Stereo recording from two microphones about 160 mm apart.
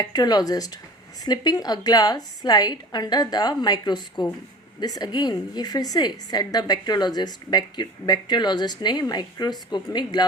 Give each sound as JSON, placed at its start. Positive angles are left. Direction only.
{"t": 0.0, "sound": "a woman's voice", "side_deg": 25}